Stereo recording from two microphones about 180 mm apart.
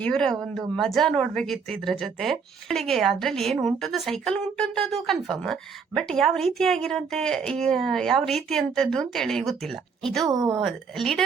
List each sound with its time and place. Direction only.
0.0 s speech: 5° left (ahead or behind)
10.2 s speech: 20° right (ahead or behind)
10.6 s speech: centre (ahead or behind)